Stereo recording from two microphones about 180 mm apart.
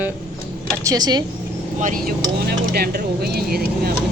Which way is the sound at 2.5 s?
60° right (ahead or behind).